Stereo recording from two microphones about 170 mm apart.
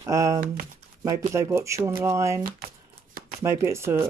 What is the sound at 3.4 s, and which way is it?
Speech, 15° right (ahead or behind).